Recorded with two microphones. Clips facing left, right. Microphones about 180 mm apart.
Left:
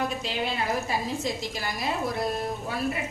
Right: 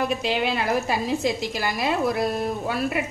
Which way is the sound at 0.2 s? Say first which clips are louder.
Right 5 dB; 75° right (ahead or behind).